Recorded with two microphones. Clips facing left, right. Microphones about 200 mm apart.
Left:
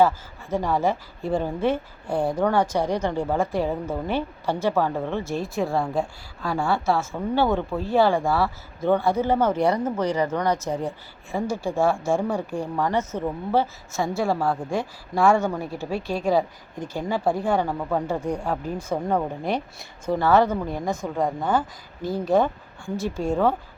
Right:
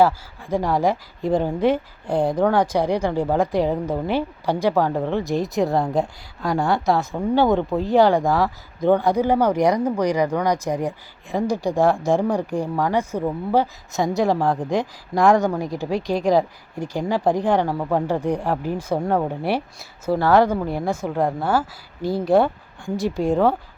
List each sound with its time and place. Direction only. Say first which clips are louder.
0.0 s speech: right 2 dB; 10° right (ahead or behind)
2.0 s speech: right 3 dB; 10° left (ahead or behind)
2.3 s speech: right 2 dB; 10° right (ahead or behind)
5.4 s speech: right 4 dB; 40° right (ahead or behind)
6.5 s speech: right 3 dB; 20° right (ahead or behind)
18.2 s speech: right 4 dB; 35° right (ahead or behind)
18.5 s speech: right 4 dB; 10° right (ahead or behind)